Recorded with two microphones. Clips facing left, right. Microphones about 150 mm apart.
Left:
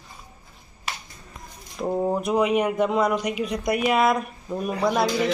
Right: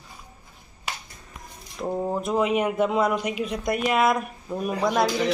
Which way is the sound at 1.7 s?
10° left (ahead or behind).